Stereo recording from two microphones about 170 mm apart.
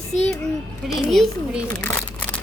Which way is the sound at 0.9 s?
Centre (ahead or behind).